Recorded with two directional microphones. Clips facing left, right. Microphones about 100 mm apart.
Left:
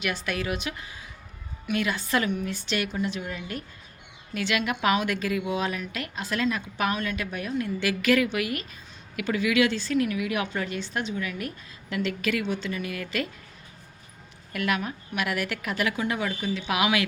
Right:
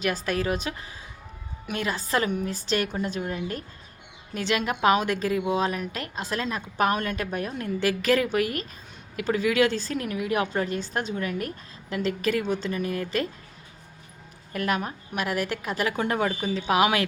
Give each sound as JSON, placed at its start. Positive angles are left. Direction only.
{"t": 0.0, "sound": "a woman's voice", "side_deg": -35}
{"t": 4.4, "sound": "a woman's voice", "side_deg": -35}
{"t": 14.5, "sound": "a woman's voice", "side_deg": -35}